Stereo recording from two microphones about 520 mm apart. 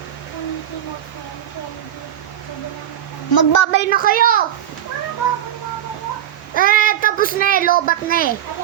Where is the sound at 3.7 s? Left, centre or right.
Centre.